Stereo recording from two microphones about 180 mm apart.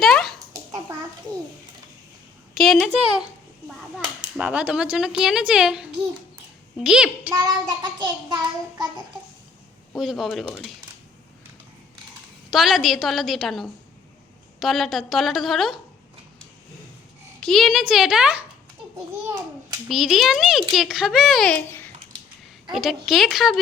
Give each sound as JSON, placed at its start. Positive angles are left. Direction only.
{"t": 0.0, "sound": "a sound", "side_deg": 0}
{"t": 2.6, "sound": "a woman's voice", "side_deg": 0}
{"t": 4.4, "sound": "a child's voice", "side_deg": -5}
{"t": 7.4, "sound": "child singing", "side_deg": -25}
{"t": 10.0, "sound": "a child's voice", "side_deg": 0}
{"t": 12.5, "sound": "a child's voice", "side_deg": 0}
{"t": 17.4, "sound": "a child's voice", "side_deg": 0}
{"t": 19.9, "sound": "a child's voice", "side_deg": 0}
{"t": 22.7, "sound": "a child's voice", "side_deg": 0}